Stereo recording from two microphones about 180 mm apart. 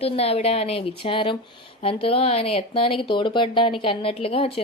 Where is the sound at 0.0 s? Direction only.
35° left (ahead or behind).